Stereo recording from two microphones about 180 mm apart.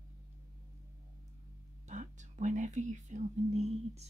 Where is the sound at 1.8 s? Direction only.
45° right (ahead or behind).